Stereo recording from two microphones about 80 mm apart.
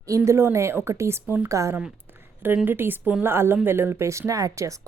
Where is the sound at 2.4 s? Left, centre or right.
Right.